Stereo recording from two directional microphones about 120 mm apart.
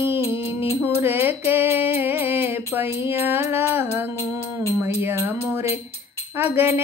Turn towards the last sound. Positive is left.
turn(degrees=-20)  # may be behind; listen again after turning